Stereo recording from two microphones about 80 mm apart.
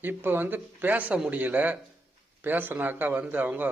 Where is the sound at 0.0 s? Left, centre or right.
Right.